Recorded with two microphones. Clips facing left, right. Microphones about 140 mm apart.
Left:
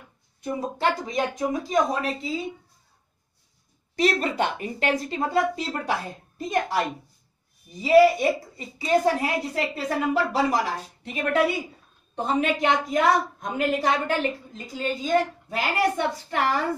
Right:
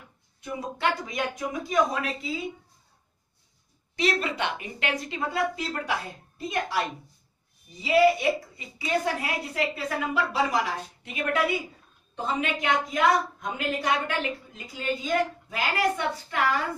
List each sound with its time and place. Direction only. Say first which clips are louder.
0.4 s speech: left 3 dB; 40° left (ahead or behind)
3.9 s speech: left 4 dB; 45° left (ahead or behind)
12.2 s speech: left 5 dB; 35° left (ahead or behind)